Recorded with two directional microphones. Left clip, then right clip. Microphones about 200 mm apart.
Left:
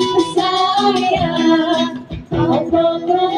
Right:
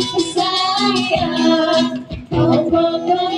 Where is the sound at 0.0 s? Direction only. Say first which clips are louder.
Left 3 dB; 35° right (ahead or behind).